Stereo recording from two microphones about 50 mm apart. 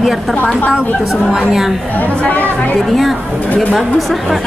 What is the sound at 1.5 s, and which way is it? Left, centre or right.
Speech, centre.